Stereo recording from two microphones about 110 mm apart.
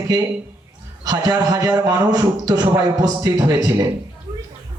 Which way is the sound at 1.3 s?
35° right (ahead or behind).